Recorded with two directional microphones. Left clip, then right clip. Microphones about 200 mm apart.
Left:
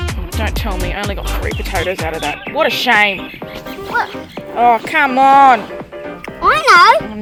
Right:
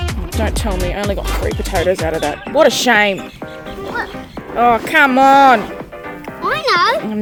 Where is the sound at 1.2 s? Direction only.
Centre (ahead or behind).